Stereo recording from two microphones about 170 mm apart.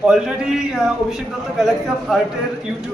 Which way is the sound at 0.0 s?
5° right (ahead or behind).